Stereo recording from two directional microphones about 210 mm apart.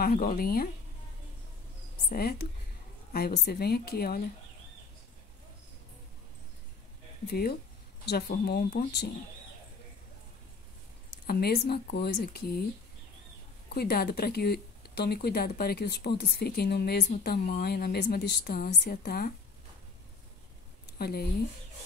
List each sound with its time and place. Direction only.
0.0 s speech: 45° left (ahead or behind)
2.0 s speech: 45° left (ahead or behind)
7.2 s speech: 45° left (ahead or behind)
11.2 s speech: 45° left (ahead or behind)
13.7 s speech: 50° left (ahead or behind)
20.8 s a sound: 50° left (ahead or behind)